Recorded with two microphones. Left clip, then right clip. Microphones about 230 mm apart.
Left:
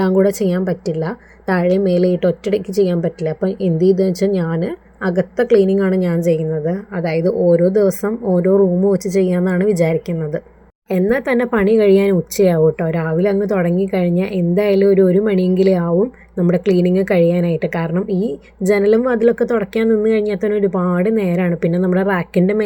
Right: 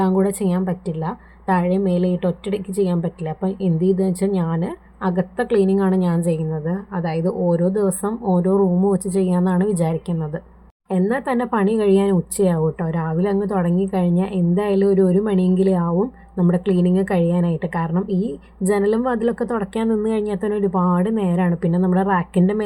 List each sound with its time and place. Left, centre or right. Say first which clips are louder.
0.0 s speech: left 5 dB; centre